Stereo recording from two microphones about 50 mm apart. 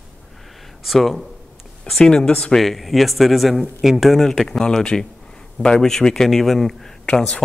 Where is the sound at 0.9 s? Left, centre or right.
Centre.